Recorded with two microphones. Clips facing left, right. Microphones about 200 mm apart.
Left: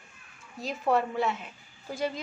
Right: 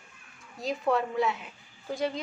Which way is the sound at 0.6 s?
Centre (ahead or behind).